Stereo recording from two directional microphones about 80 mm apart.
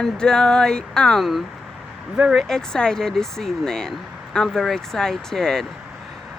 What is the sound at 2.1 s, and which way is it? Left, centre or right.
Speech, centre.